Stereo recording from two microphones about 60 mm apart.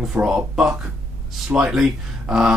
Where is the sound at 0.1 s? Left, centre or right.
Centre.